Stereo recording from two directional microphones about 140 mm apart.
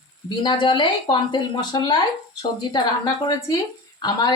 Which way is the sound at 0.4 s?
35° left (ahead or behind).